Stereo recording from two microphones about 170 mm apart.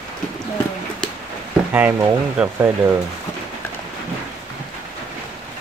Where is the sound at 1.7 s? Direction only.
10° right (ahead or behind).